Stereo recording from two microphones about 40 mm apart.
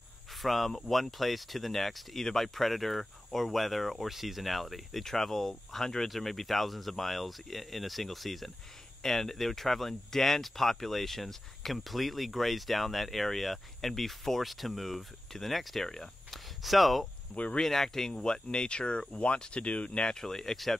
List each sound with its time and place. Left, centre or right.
0.4 s speech: centre; by 20.1 s left
20.1 s speech: centre